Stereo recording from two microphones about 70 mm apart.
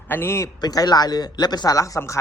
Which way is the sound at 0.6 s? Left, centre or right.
Left.